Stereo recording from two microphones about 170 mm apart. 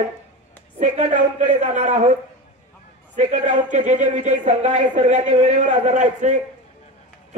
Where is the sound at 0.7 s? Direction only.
45° right (ahead or behind).